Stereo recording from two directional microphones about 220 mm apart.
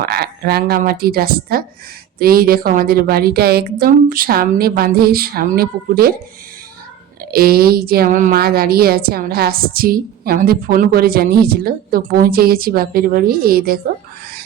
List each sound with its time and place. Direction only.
0.0 s a woman's voice: 45° right (ahead or behind)
7.3 s a woman's voice: 45° right (ahead or behind)